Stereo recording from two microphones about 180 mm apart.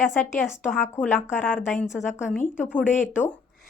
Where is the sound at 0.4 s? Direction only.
5° right (ahead or behind).